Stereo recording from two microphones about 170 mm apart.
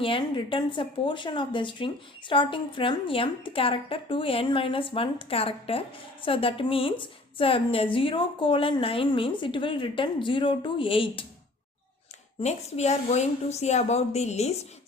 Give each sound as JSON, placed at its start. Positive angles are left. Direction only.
{"t": 0.0, "sound": "speech", "side_deg": 30}
{"t": 12.4, "sound": "speech", "side_deg": 40}